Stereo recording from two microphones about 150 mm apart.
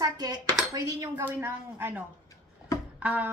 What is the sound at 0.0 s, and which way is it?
Dishes, 25° right (ahead or behind).